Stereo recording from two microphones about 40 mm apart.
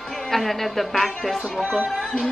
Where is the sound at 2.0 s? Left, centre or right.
Left.